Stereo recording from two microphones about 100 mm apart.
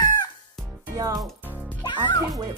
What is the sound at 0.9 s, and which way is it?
Music, 35° right (ahead or behind).